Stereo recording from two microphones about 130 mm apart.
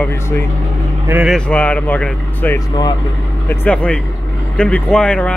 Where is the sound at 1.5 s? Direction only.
10° left (ahead or behind).